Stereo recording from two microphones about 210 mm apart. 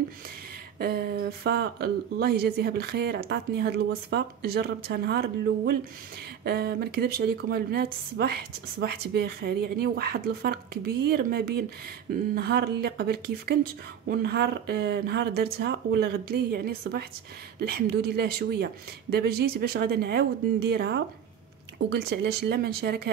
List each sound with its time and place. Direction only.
0.7 s a woman's voice: 50° right (ahead or behind)
6.4 s a woman's voice: 50° right (ahead or behind)